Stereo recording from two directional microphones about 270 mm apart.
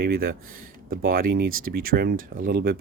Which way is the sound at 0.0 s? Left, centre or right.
Right.